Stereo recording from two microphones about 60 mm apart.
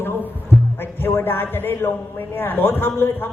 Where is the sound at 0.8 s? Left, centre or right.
Left.